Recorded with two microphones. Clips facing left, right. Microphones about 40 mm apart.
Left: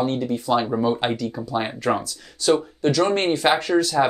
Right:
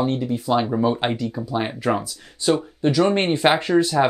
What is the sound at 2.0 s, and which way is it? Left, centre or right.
Speech, centre.